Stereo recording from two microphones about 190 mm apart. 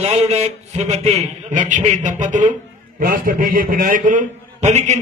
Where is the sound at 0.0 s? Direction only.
35° right (ahead or behind).